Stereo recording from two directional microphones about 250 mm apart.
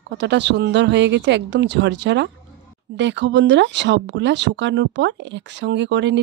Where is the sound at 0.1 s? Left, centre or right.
Right.